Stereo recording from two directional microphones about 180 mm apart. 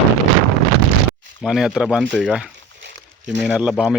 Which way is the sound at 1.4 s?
5° right (ahead or behind).